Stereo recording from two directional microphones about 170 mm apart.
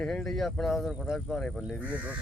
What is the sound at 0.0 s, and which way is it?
Speech, 5° left (ahead or behind).